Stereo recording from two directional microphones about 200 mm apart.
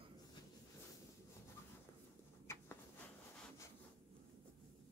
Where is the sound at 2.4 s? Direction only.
15° left (ahead or behind).